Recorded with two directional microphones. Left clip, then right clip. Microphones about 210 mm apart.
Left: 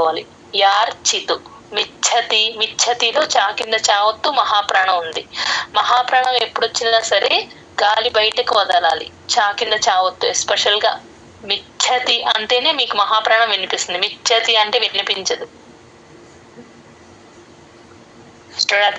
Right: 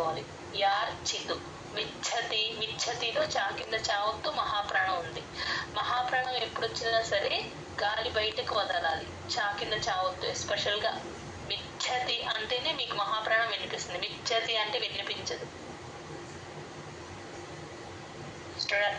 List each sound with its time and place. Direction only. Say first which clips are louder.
0.0 s a woman's voice: left 15 dB; 45° left (ahead or behind)
18.6 s speech: left 14 dB; 45° left (ahead or behind)